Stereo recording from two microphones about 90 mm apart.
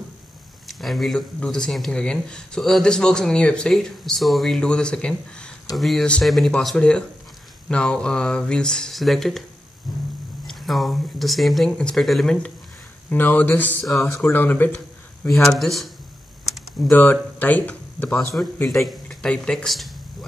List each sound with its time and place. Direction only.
0.7 s speech: centre (ahead or behind)
10.4 s a sound: centre (ahead or behind)
11.7 s speech: 10° left (ahead or behind)
13.1 s speech: 20° left (ahead or behind)
13.8 s speech: centre (ahead or behind)
14.2 s speech: 20° left (ahead or behind)
15.3 s speech: centre (ahead or behind)
16.4 s typing: centre (ahead or behind)
16.9 s speech: 20° left (ahead or behind)
18.1 s speech: centre (ahead or behind)